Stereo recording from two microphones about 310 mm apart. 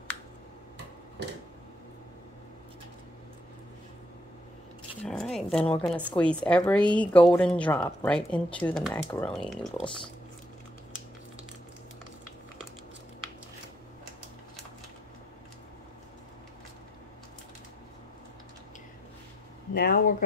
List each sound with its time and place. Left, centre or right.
1.2 s a sound: right
5.0 s a woman's voice: centre
19.7 s speech: left